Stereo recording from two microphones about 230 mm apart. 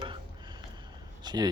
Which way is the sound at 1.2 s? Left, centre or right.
Centre.